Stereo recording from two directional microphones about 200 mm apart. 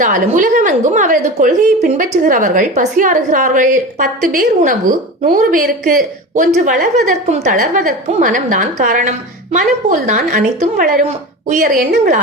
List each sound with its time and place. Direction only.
0.0 s a woman's voice: 40° right (ahead or behind)